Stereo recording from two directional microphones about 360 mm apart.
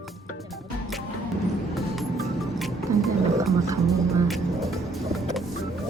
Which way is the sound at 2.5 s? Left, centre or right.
Centre.